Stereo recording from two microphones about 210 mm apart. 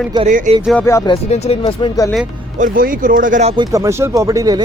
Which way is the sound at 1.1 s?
30° left (ahead or behind).